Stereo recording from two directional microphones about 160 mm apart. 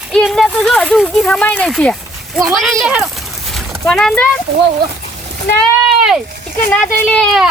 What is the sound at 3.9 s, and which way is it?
Speech, 5° left (ahead or behind).